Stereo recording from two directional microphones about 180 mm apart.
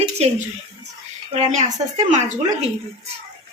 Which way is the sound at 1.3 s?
40° right (ahead or behind).